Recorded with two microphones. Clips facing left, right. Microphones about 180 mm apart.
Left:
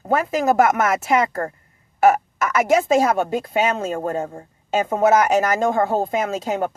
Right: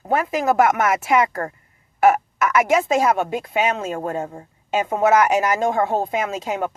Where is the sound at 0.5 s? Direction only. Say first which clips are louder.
Even; 40° left (ahead or behind).